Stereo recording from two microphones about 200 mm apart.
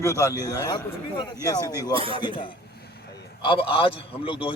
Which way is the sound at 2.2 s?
25° left (ahead or behind).